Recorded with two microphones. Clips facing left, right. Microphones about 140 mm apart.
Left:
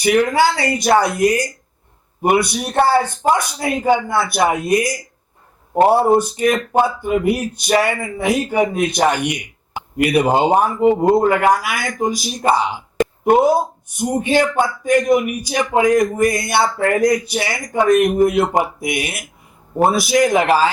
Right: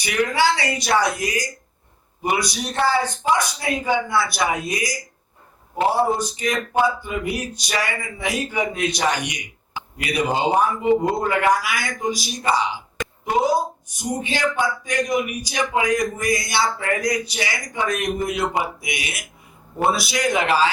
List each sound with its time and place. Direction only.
0.0 s a man's voice: 50° left (ahead or behind)